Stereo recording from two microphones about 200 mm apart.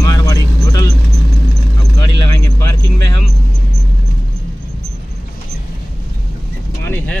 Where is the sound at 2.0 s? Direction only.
20° left (ahead or behind).